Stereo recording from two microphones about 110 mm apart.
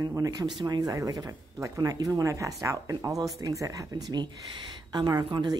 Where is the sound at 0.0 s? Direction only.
30° right (ahead or behind).